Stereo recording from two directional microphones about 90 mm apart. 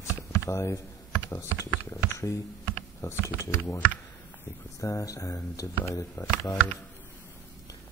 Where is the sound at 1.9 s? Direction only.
35° left (ahead or behind).